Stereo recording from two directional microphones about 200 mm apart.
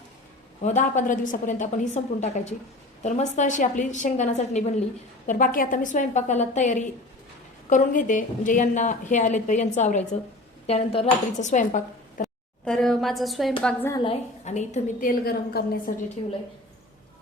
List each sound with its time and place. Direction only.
0.6 s a woman's voice: 35° left (ahead or behind)
12.6 s a woman's voice: centre (ahead or behind)
13.9 s a woman's voice: 25° left (ahead or behind)
15.2 s a woman's voice: 50° left (ahead or behind)